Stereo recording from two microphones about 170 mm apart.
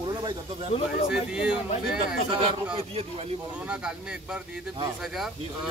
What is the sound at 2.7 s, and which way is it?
Speech, 35° right (ahead or behind).